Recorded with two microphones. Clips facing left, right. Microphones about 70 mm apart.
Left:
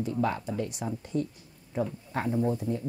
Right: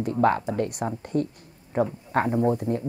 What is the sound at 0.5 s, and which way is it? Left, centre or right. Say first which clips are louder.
Speech: right 5 dB; right.